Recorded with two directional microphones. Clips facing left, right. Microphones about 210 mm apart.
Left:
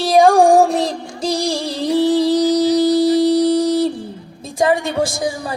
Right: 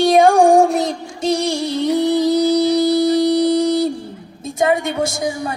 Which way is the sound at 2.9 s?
30° left (ahead or behind).